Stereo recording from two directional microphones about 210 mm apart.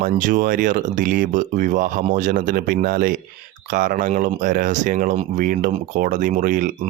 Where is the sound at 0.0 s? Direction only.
40° right (ahead or behind).